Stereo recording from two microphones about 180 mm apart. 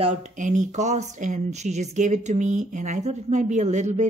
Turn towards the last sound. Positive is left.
turn(degrees=-40)  # may be behind; listen again after turning